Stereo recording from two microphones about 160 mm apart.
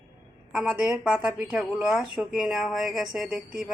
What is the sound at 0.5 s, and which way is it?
Speech, 5° right (ahead or behind).